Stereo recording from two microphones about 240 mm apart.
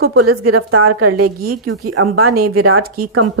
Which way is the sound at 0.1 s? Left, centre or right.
Right.